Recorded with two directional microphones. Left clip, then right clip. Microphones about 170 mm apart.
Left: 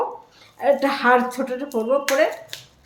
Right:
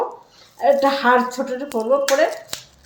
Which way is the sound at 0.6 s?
20° left (ahead or behind).